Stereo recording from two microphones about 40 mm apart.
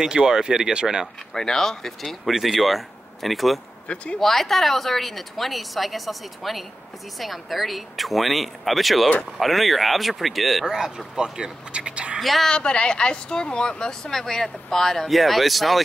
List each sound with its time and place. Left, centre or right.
0.0 s speech: centre
1.3 s speech: centre
2.0 s a woman's voice: centre
3.9 s speech: left
4.2 s a woman's voice: centre
10.6 s speech: centre
11.7 s a sound: right
12.2 s a woman's voice: centre
12.4 s speech: left
15.0 s a woman's voice: centre